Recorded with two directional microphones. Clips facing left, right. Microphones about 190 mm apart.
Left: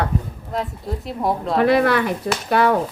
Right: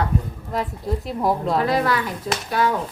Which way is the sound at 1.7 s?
65° left (ahead or behind).